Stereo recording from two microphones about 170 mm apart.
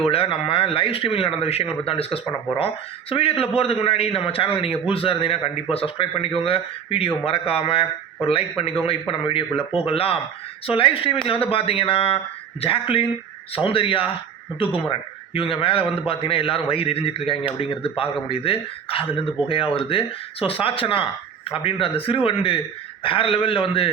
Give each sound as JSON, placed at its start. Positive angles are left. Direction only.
{"t": 0.0, "sound": "a man's voice", "side_deg": 35}